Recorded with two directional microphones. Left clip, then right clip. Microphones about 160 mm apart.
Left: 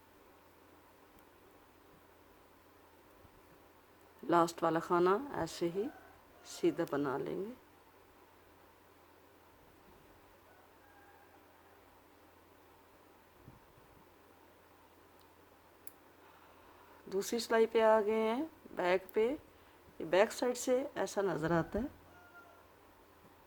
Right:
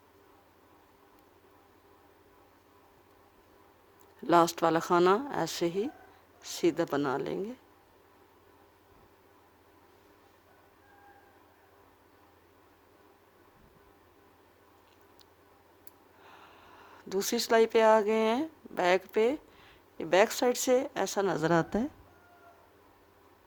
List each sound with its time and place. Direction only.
4.3 s speech: 65° right (ahead or behind)
17.1 s speech: 65° right (ahead or behind)